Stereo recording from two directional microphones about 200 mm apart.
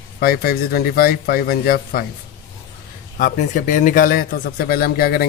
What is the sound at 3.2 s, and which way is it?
A man's voice, 40° left (ahead or behind).